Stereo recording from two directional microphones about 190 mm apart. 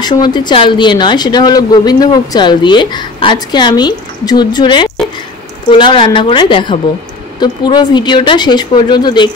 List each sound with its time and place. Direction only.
0.0 s a woman's voice: 20° left (ahead or behind)